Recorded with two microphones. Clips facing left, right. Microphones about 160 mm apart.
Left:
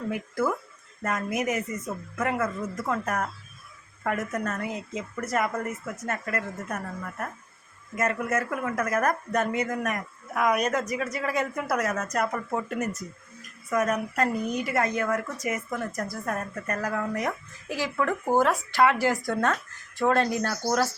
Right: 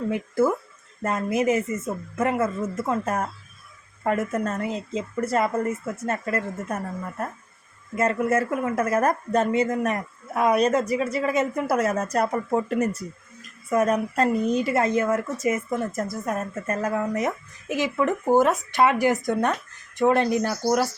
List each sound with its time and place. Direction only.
0.1 s a woman's voice: 25° right (ahead or behind)